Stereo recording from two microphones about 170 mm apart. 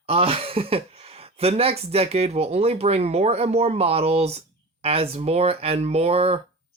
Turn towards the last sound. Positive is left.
turn(degrees=-35)  # may be behind; listen again after turning